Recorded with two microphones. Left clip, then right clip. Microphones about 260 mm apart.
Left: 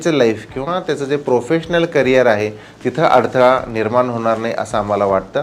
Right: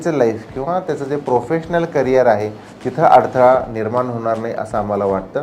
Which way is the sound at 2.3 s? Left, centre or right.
Left.